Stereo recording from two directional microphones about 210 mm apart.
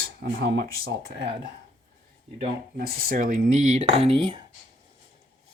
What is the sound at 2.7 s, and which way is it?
Speech, 45° right (ahead or behind).